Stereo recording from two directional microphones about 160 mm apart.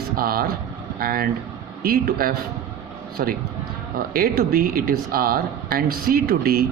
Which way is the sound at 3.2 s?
55° right (ahead or behind).